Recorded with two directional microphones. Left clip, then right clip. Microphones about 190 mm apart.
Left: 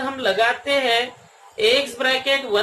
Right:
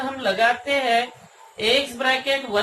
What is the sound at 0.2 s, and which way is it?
Speech, 35° left (ahead or behind).